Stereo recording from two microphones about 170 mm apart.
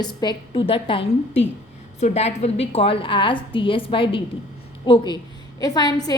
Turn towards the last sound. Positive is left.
turn(degrees=25)  # may be behind; listen again after turning